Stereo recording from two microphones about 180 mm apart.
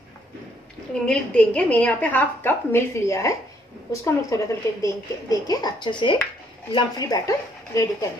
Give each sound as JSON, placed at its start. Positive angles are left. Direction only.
{"t": 1.0, "sound": "a woman's voice", "side_deg": 5}